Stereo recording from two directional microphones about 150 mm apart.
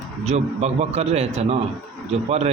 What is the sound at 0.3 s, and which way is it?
A man's voice, 45° right (ahead or behind).